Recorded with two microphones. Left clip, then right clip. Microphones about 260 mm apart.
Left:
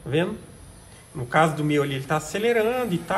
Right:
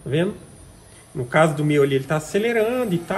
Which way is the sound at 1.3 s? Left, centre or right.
Centre.